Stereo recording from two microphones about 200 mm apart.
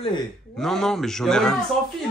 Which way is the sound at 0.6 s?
Centre (ahead or behind).